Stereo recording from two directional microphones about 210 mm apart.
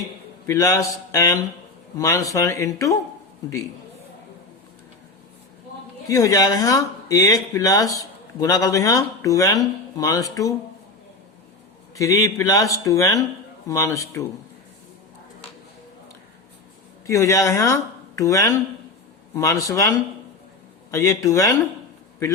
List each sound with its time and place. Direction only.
0.4 s speech: 15° left (ahead or behind)
6.1 s speech: 15° left (ahead or behind)
11.9 s speech: 15° left (ahead or behind)
17.1 s speech: 15° left (ahead or behind)